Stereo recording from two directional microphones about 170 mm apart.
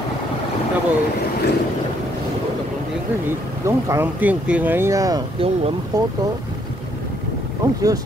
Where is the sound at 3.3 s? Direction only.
15° right (ahead or behind).